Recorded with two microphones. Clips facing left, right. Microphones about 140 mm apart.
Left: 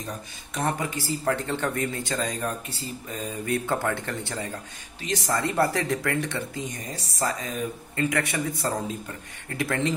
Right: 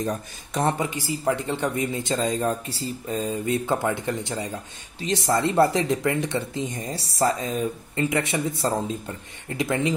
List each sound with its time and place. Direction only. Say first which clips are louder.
0.6 s speech: right 4 dB; 25° right (ahead or behind)
5.0 s speech: right 4 dB; 30° right (ahead or behind)